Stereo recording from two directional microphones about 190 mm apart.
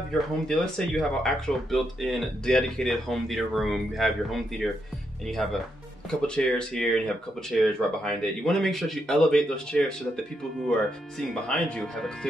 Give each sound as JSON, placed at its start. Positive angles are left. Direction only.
{"t": 0.1, "sound": "speech", "side_deg": 5}
{"t": 6.2, "sound": "speech", "side_deg": 5}